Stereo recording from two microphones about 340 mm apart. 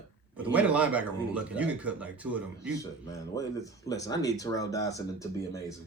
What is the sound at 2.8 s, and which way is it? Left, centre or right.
Speech, centre.